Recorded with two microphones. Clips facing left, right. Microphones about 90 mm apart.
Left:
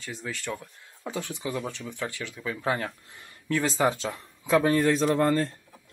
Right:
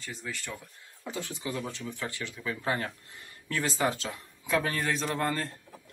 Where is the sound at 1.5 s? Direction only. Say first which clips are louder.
Left 3 dB; centre (ahead or behind).